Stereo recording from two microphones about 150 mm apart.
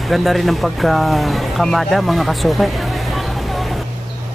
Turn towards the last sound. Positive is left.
turn(degrees=0)  # may be behind; listen again after turning